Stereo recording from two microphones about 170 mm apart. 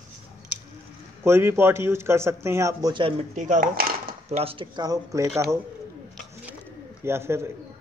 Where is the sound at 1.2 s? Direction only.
15° right (ahead or behind).